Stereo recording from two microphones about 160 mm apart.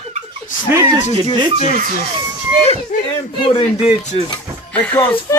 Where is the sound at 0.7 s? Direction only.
20° right (ahead or behind).